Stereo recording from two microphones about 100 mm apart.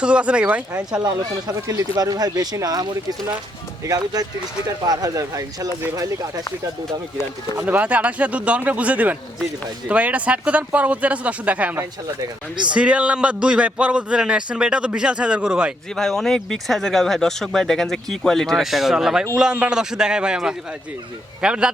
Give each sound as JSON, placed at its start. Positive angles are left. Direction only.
{"t": 0.0, "sound": "a man's voice", "side_deg": -10}
{"t": 1.0, "sound": "speech", "side_deg": -35}
{"t": 7.6, "sound": "a man's voice", "side_deg": -15}
{"t": 16.0, "sound": "a man's voice", "side_deg": 5}